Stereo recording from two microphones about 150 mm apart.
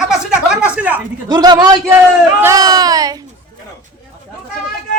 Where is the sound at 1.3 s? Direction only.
25° right (ahead or behind).